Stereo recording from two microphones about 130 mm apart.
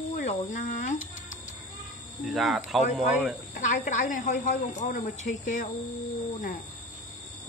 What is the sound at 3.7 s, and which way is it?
Speech, 80° left.